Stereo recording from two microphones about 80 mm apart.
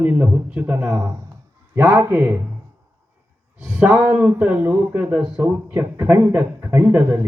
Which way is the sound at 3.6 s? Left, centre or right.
Centre.